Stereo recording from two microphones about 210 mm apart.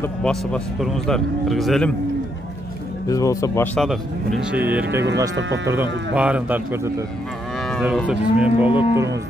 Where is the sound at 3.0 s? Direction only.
15° left (ahead or behind).